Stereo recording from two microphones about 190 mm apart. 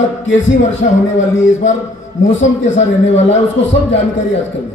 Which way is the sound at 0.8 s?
45° left (ahead or behind).